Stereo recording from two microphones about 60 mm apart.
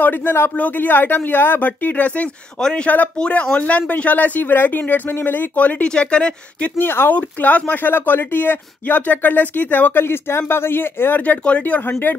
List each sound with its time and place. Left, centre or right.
0.0 s speech: left; by 6.7 s centre
6.8 s speech: left
7.2 s speech: left
10.0 s speech: left
11.9 s speech: left